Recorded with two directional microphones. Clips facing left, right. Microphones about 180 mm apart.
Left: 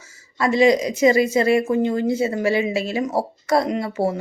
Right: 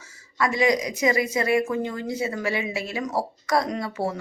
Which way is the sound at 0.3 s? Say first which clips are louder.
Left 6 dB; 30° left (ahead or behind).